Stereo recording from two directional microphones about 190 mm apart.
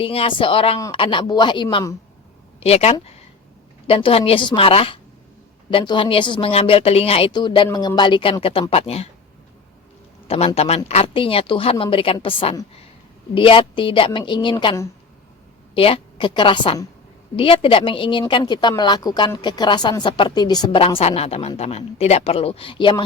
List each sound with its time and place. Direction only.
0.0 s speech: 30° left (ahead or behind)
2.6 s speech: 35° left (ahead or behind)
10.2 s speech: 30° left (ahead or behind)